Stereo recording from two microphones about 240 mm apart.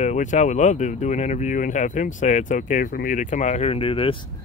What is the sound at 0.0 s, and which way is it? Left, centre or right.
Speech, left.